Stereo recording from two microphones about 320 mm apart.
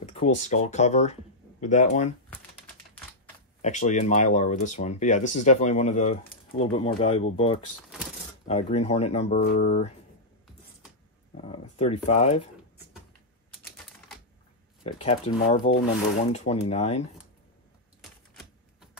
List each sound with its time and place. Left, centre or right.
0.0 s speech: centre
2.3 s typing: centre
3.6 s speech: left
11.4 s speech: centre
13.6 s typewriter: centre
14.8 s speech: centre
18.3 s typewriter: centre